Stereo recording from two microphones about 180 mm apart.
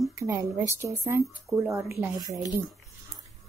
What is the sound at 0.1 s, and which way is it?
A woman's voice, 15° right (ahead or behind).